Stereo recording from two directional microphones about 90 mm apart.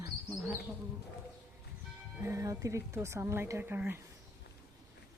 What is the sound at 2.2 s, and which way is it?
A woman's voice, 35° right (ahead or behind).